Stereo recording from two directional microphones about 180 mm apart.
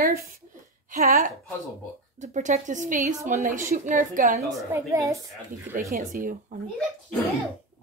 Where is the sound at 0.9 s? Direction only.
45° right (ahead or behind).